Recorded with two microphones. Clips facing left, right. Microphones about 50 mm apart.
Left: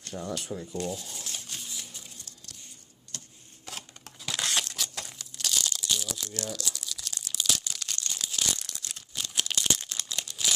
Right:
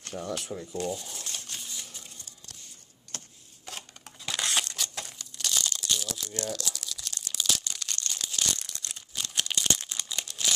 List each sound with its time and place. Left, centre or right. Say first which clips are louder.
0.1 s speech: even; centre
0.5 s a sound: right 1 dB; centre
3.1 s a sound: right 2 dB; right
3.6 s crumpling: even; centre
6.5 s tearing: right 1 dB; centre
9.9 s crumpling: even; centre